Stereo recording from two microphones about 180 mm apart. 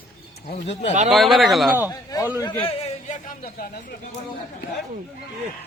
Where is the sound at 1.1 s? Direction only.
Centre (ahead or behind).